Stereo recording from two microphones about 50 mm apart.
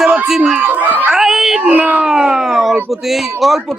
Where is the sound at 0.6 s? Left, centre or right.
Right.